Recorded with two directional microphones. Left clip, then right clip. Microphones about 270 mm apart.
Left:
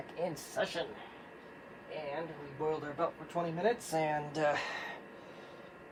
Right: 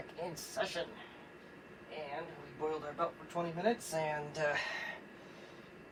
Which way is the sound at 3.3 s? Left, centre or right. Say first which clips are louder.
Left 2 dB; left.